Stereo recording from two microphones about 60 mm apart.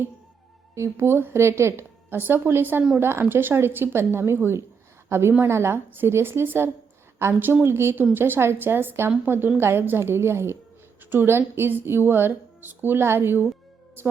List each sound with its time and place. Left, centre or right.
0.8 s a woman's voice: right
2.0 s a woman's voice: right
7.6 s a woman's voice: right